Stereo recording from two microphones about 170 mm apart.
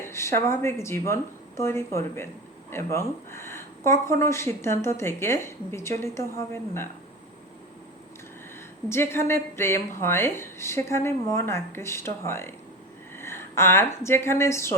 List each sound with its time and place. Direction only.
0.0 s speech: 15° left (ahead or behind)
8.9 s speech: 15° left (ahead or behind)